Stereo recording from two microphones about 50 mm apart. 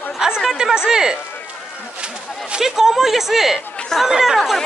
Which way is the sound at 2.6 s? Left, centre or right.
Centre.